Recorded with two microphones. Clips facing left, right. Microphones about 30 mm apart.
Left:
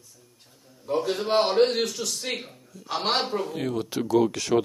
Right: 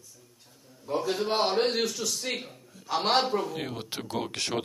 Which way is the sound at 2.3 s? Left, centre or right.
Centre.